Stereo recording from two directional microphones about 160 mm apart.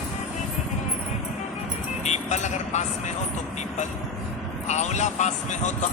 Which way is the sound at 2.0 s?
45° left (ahead or behind).